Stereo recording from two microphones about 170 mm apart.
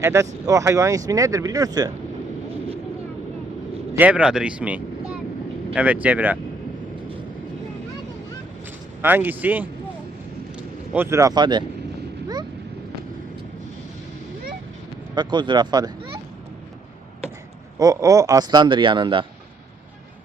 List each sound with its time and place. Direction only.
0.0 s speech: 20° right (ahead or behind)
3.9 s speech: 10° right (ahead or behind)
9.0 s speech: 10° right (ahead or behind)
10.9 s speech: 15° right (ahead or behind)
15.1 s speech: 25° right (ahead or behind)
17.7 s speech: 20° right (ahead or behind)